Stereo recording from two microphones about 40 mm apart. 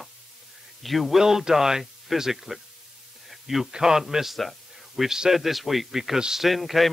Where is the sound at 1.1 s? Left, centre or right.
Centre.